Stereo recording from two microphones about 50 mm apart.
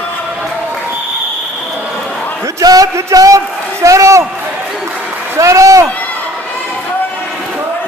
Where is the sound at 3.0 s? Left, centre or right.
Right.